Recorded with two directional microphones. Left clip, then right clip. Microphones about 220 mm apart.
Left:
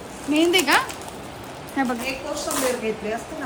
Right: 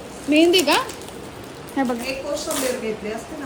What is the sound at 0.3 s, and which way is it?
Speech, centre (ahead or behind).